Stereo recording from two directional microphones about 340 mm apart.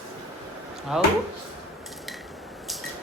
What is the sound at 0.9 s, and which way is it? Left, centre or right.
Speech, centre.